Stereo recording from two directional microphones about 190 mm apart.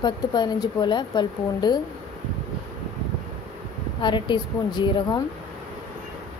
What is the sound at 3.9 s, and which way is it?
Speech, 25° left (ahead or behind).